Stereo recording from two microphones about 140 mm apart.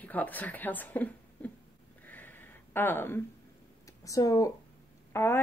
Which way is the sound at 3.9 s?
25° left (ahead or behind).